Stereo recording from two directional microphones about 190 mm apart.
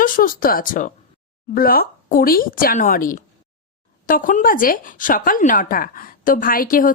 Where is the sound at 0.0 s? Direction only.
45° left (ahead or behind).